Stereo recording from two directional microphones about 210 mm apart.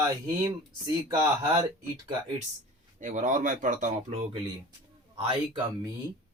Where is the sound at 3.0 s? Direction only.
40° right (ahead or behind).